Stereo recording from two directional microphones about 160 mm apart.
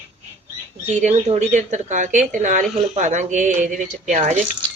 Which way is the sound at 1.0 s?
50° right (ahead or behind).